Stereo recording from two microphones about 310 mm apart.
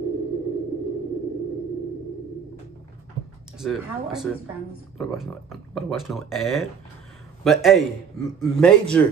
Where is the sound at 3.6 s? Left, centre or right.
Centre.